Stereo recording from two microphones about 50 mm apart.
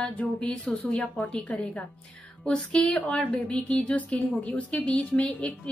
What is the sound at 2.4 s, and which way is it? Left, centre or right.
Speech, centre.